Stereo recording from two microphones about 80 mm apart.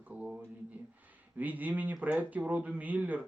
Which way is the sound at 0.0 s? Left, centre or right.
Centre.